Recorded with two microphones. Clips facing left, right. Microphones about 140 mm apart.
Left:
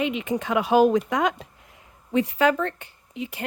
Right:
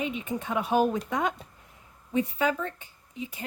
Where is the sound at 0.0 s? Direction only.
90° left.